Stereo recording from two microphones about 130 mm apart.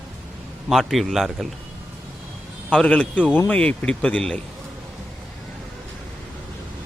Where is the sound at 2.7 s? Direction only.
10° left (ahead or behind).